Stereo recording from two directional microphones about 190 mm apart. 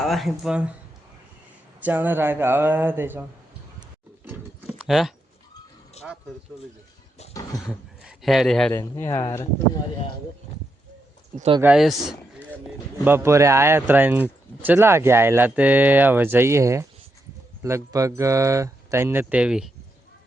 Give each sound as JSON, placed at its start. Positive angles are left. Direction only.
{"t": 0.0, "sound": "speech", "side_deg": 0}
{"t": 1.8, "sound": "speech", "side_deg": -10}
{"t": 4.6, "sound": "a sound", "side_deg": 0}
{"t": 6.0, "sound": "speech", "side_deg": 35}
{"t": 7.6, "sound": "speech", "side_deg": 0}
{"t": 8.7, "sound": "speech", "side_deg": 15}
{"t": 11.6, "sound": "speech", "side_deg": -5}
{"t": 13.1, "sound": "speech", "side_deg": -15}